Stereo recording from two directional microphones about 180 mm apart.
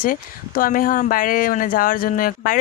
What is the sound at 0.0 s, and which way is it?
Speech, 50° left (ahead or behind).